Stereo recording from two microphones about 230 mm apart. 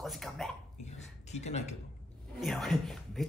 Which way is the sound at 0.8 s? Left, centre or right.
Left.